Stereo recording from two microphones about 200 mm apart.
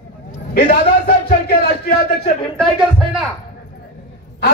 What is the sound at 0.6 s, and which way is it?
A man's voice, 50° left (ahead or behind).